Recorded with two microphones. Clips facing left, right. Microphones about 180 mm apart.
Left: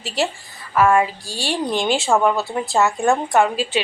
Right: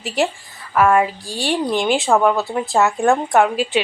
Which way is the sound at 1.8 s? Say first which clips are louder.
Right 2 dB; 15° right (ahead or behind).